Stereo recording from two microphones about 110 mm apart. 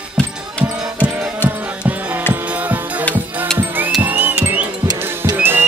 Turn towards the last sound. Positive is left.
turn(degrees=-20)  # may be behind; listen again after turning